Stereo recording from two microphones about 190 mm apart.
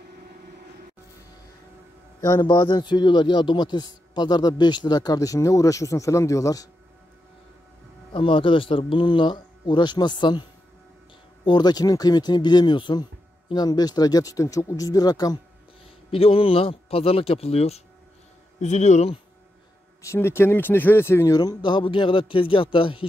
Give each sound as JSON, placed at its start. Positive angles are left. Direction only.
{"t": 2.2, "sound": "a man's voice", "side_deg": 15}
{"t": 8.1, "sound": "a man's voice", "side_deg": 25}
{"t": 11.4, "sound": "a man's voice", "side_deg": 20}
{"t": 20.0, "sound": "a man's voice", "side_deg": 15}